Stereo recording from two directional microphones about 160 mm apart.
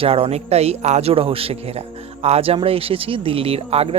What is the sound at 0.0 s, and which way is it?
A man's voice, 35° right (ahead or behind).